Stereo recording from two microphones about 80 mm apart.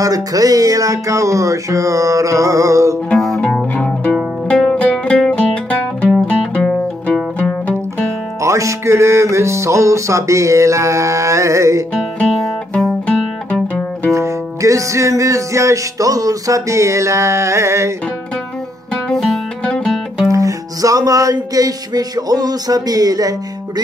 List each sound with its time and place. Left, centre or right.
0.0 s music: right
3.7 s music: centre
4.1 s music: centre
8.4 s music: right
12.4 s music: centre
13.0 s music: centre
14.1 s music: right
19.0 s music: centre
20.2 s music: right